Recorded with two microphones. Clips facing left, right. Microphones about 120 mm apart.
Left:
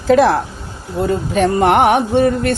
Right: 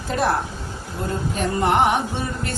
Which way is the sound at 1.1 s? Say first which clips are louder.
Left 9 dB; 85° left.